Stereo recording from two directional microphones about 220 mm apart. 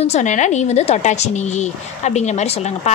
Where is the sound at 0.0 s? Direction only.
30° left (ahead or behind).